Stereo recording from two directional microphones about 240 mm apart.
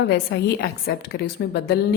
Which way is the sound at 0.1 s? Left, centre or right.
Left.